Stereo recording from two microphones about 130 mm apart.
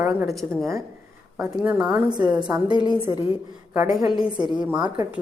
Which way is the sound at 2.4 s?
35° right (ahead or behind).